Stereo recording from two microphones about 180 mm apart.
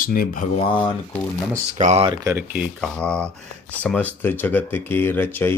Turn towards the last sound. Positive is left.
turn(degrees=10)  # may be behind; listen again after turning